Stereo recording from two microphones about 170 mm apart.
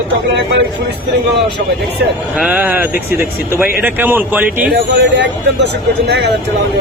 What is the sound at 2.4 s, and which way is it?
A man's voice, 10° right (ahead or behind).